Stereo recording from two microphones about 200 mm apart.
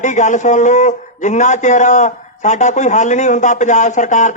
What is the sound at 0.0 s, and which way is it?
A man's voice, 40° left (ahead or behind).